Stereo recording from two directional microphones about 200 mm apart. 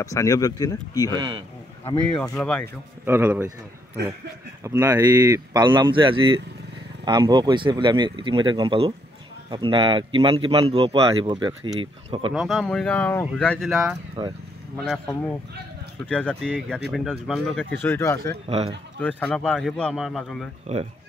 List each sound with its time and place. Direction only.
0.0 s speech: 15° left (ahead or behind)
1.1 s speech: 20° right (ahead or behind)
2.3 s speech: 5° left (ahead or behind)
3.1 s a man's voice: 10° right (ahead or behind)
4.6 s speech: 15° right (ahead or behind)
12.4 s speech: centre (ahead or behind)
14.2 s speech: 20° right (ahead or behind)
14.8 s speech: 5° left (ahead or behind)